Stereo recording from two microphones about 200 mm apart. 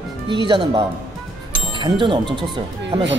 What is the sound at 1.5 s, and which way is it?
Music, 25° right (ahead or behind).